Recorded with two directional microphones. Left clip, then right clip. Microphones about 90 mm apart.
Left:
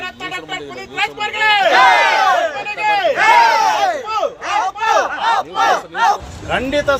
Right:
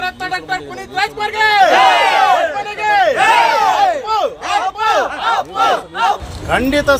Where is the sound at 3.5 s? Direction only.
20° left (ahead or behind).